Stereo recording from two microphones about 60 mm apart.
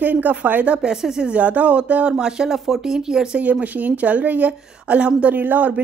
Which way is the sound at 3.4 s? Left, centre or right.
Right.